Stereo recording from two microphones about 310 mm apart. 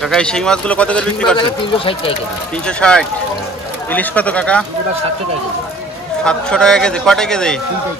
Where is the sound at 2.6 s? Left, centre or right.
Centre.